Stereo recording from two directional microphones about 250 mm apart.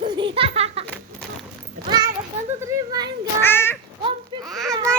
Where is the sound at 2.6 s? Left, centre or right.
Centre.